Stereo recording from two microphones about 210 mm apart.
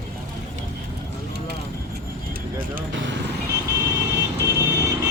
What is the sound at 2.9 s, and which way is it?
Vehicle, 60° right (ahead or behind).